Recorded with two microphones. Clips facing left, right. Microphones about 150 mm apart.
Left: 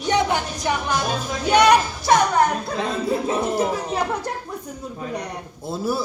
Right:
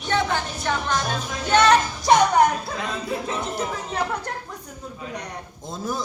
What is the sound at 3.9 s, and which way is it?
A woman's voice, 10° left (ahead or behind).